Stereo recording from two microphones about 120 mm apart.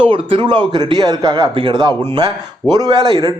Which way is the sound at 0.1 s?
45° right (ahead or behind).